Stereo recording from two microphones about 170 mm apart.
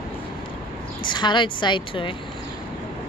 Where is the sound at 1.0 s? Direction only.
25° left (ahead or behind).